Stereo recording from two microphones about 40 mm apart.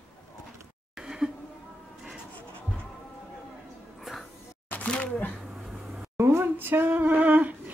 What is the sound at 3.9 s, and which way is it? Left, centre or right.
Cat, centre.